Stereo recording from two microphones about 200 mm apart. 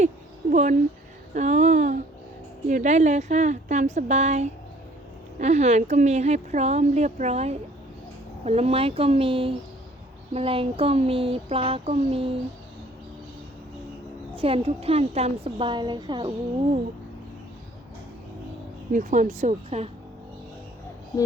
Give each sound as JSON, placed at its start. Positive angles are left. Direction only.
{"t": 0.5, "sound": "speech", "side_deg": -40}
{"t": 14.3, "sound": "speech", "side_deg": -30}
{"t": 18.9, "sound": "speech", "side_deg": -40}